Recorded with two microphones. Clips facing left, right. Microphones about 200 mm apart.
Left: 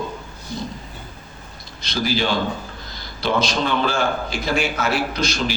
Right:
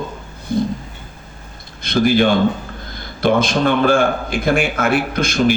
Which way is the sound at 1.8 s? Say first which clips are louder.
Right 8 dB; 55° right (ahead or behind).